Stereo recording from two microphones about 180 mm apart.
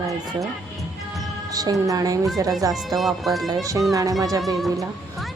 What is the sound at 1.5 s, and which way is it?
Speech, 20° right (ahead or behind).